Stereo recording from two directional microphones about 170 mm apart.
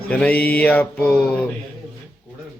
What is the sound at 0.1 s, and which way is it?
Speech, 10° left (ahead or behind).